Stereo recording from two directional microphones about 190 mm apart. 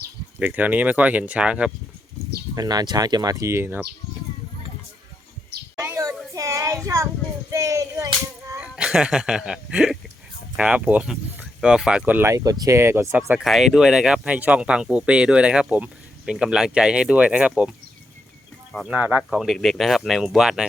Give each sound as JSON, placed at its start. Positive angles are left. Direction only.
{"t": 0.3, "sound": "speech", "side_deg": -10}
{"t": 2.6, "sound": "speech", "side_deg": -20}
{"t": 5.8, "sound": "a sound", "side_deg": -15}
{"t": 6.3, "sound": "child singing", "side_deg": -15}
{"t": 6.8, "sound": "speech", "side_deg": -15}
{"t": 7.5, "sound": "whip", "side_deg": -15}
{"t": 8.6, "sound": "speech", "side_deg": -5}
{"t": 18.7, "sound": "speech", "side_deg": 0}